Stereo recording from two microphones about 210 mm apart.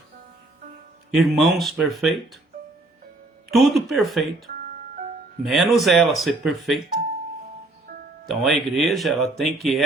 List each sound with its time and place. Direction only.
1.1 s speech: centre (ahead or behind)
3.5 s speech: centre (ahead or behind)
4.5 s music: 40° right (ahead or behind)
5.4 s speech: centre (ahead or behind)
8.3 s speech: centre (ahead or behind)